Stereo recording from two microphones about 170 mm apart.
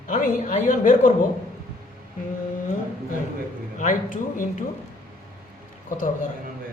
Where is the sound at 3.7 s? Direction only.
50° left (ahead or behind).